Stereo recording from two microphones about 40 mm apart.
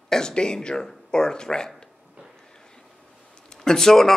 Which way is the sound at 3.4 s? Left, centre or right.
Centre.